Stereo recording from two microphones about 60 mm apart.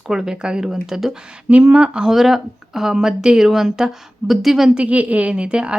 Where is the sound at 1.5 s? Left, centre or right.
Right; by 4.7 s centre.